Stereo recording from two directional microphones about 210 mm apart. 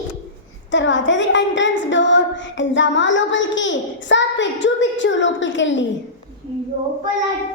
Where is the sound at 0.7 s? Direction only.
60° left (ahead or behind).